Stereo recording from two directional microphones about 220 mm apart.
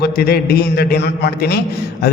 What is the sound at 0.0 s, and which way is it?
A man's voice, 45° left (ahead or behind).